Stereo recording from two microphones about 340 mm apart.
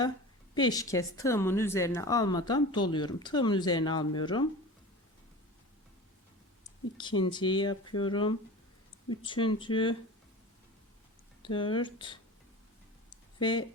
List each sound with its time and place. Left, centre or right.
0.5 s speech: centre
6.9 s speech: centre
11.4 s speech: centre
13.4 s speech: centre